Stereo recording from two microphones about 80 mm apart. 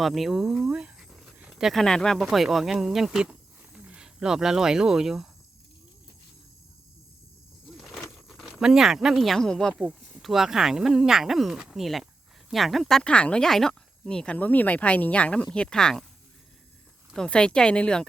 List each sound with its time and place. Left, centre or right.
0.0 s speech: centre
1.7 s speech: centre
7.8 s cricket: centre
10.2 s speech: centre
13.0 s speech: centre
14.3 s speech: left
17.2 s speech: centre